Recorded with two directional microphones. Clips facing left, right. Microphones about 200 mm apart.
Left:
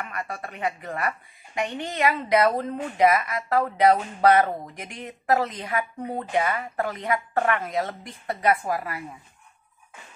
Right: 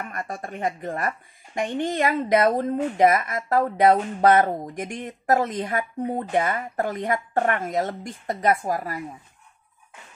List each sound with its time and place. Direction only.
0.0 s speech: 45° right (ahead or behind)